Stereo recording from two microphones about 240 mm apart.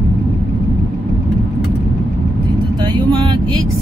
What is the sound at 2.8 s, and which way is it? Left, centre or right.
Vehicle, centre.